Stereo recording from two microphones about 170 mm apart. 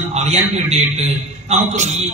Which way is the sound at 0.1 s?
40° right (ahead or behind).